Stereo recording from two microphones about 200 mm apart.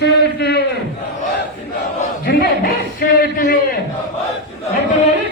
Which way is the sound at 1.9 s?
50° left (ahead or behind).